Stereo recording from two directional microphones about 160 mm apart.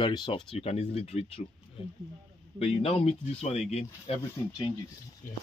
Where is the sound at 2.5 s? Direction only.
40° left (ahead or behind).